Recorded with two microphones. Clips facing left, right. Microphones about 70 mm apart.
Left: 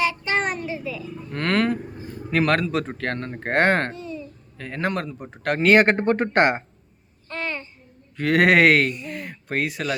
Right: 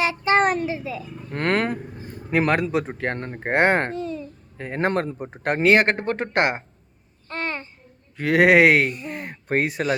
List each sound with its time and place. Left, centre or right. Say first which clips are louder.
0.0 s child singing: right 4 dB; right
0.6 s a sound: right 2 dB; right
1.3 s vehicle: even; right
2.3 s speech: even; centre
3.9 s babbling: right 5 dB; right
4.5 s a man's voice: right 3 dB; right
5.2 s speech: right 1 dB; right
5.6 s speech: left 2 dB; centre
7.3 s babbling: right 1 dB; right
8.1 s speech: right 1 dB; centre
9.0 s speech: right 1 dB; right